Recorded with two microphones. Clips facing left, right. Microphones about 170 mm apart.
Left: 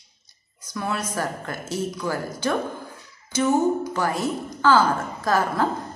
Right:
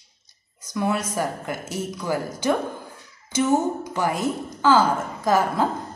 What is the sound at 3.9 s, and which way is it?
A woman's voice, 15° right (ahead or behind).